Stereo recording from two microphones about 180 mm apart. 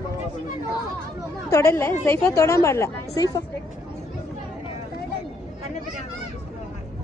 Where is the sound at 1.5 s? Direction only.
15° left (ahead or behind).